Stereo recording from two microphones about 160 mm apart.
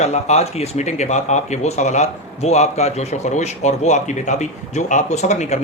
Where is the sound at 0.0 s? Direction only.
45° left (ahead or behind).